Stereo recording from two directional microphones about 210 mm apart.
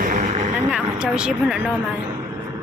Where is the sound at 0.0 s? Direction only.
40° right (ahead or behind).